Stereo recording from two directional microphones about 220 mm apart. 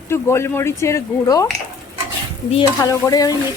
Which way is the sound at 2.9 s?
15° left (ahead or behind).